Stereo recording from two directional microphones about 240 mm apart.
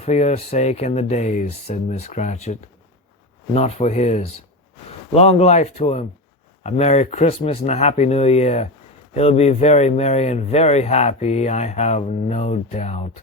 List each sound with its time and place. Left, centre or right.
0.0 s speech: left